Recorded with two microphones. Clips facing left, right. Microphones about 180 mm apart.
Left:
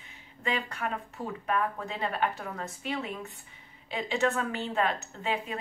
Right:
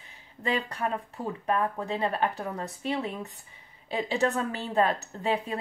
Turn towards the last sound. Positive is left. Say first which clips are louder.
# right 4 dB
turn(degrees=-35)  # may be behind; listen again after turning